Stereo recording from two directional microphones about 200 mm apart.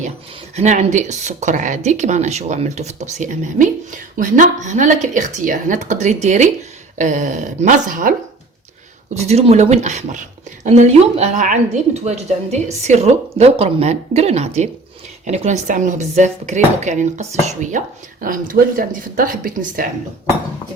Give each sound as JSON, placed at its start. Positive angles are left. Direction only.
{"t": 0.5, "sound": "speech", "side_deg": -35}
{"t": 9.1, "sound": "speech", "side_deg": -30}